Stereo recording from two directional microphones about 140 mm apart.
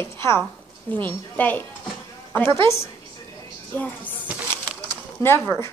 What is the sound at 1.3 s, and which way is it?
Speech, 10° left (ahead or behind).